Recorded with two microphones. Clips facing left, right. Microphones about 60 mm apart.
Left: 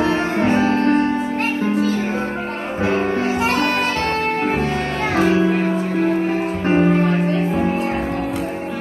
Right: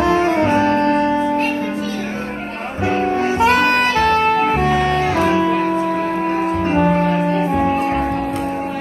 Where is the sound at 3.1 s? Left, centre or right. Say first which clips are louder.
Right 4 dB; right.